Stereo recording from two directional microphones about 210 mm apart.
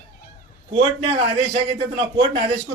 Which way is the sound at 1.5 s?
25° right (ahead or behind).